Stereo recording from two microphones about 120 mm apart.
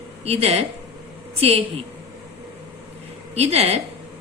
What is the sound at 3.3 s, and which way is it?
Speech, 60° right (ahead or behind).